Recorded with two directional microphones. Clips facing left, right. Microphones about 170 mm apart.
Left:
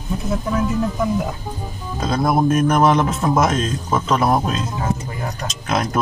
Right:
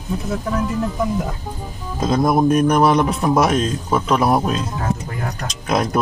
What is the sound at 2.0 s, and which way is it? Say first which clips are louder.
Speech: right 2 dB; 15° right (ahead or behind).